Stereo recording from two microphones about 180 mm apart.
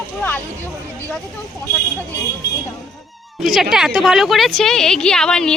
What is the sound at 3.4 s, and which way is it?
A woman's voice, centre (ahead or behind).